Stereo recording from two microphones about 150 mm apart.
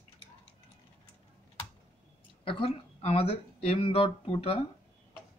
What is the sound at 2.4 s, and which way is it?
Speech, 35° left (ahead or behind).